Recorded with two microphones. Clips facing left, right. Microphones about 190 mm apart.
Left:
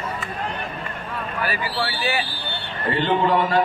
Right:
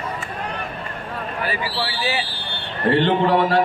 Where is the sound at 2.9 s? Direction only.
70° right (ahead or behind).